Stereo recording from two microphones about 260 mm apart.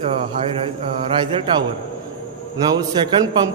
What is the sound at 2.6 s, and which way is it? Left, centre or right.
Speech, centre.